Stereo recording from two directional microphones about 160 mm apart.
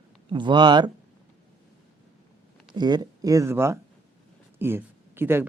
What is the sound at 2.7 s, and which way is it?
Speech, 25° right (ahead or behind).